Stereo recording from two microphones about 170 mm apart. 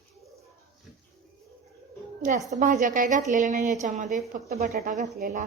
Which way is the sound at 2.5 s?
50° right (ahead or behind).